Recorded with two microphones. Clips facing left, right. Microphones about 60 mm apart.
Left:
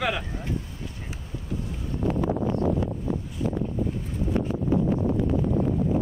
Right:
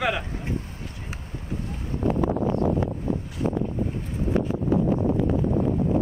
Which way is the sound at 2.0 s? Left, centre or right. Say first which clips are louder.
Right 2 dB; right.